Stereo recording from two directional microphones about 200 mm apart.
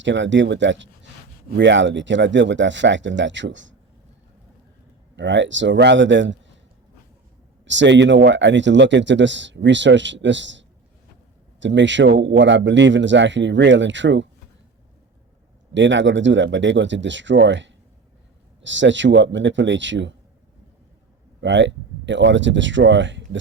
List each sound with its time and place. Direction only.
0.0 s speech: 65° right (ahead or behind)
5.1 s speech: 65° right (ahead or behind)
7.6 s speech: 65° right (ahead or behind)
11.6 s speech: 65° right (ahead or behind)
15.7 s speech: 65° right (ahead or behind)
21.4 s speech: 65° right (ahead or behind)